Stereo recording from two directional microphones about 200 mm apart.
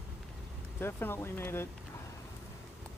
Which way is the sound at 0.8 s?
10° left (ahead or behind).